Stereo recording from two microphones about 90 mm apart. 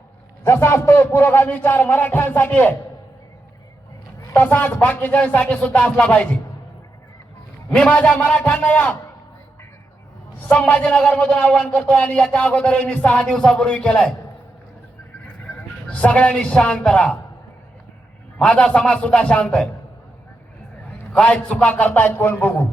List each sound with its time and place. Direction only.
0.4 s a man's voice: 30° left (ahead or behind)
4.4 s speech: 20° left (ahead or behind)
7.7 s speech: 15° left (ahead or behind)
10.5 s speech: 15° left (ahead or behind)
15.2 s speech: 20° left (ahead or behind)
18.3 s speech: 10° left (ahead or behind)
21.1 s speech: 10° left (ahead or behind)